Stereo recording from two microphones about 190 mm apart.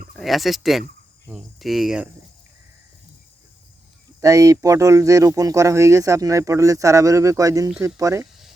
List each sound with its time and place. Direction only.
0.2 s speech: centre (ahead or behind)
4.2 s speech: 15° right (ahead or behind)